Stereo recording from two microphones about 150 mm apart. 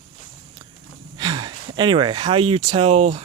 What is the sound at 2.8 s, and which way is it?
Speech, 45° right (ahead or behind).